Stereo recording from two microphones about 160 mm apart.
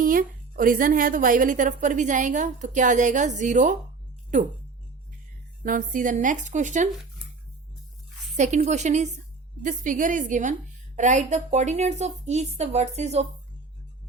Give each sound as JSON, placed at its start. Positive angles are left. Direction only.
{"t": 0.0, "sound": "a woman's voice", "side_deg": -60}
{"t": 5.6, "sound": "a woman's voice", "side_deg": -55}
{"t": 8.4, "sound": "a woman's voice", "side_deg": -45}